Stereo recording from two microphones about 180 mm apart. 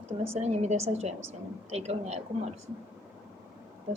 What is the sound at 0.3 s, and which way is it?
A woman's voice, 40° right (ahead or behind).